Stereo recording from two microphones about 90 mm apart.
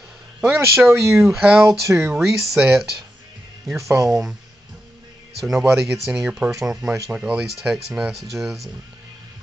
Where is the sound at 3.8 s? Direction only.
35° right (ahead or behind).